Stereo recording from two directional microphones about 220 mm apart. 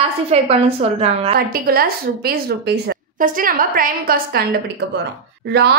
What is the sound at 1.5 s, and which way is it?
A woman's voice, 40° right (ahead or behind).